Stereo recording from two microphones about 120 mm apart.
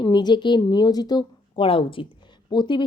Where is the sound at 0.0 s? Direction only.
35° left (ahead or behind).